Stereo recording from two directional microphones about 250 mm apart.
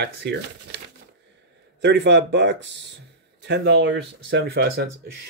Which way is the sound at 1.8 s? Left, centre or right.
Right.